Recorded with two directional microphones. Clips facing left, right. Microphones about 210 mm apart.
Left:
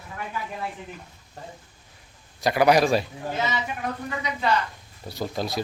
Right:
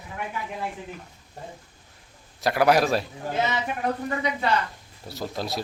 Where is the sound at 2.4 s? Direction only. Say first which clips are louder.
Left 1 dB; centre (ahead or behind).